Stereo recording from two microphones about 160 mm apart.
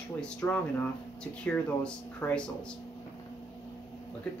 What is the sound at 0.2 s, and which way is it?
Speech, 5° left (ahead or behind).